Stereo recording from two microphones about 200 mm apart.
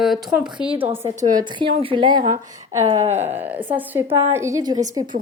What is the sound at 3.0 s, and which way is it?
Speech, 35° right (ahead or behind).